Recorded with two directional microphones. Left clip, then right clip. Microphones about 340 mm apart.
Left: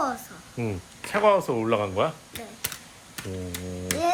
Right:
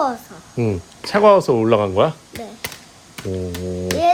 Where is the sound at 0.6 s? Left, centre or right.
Right.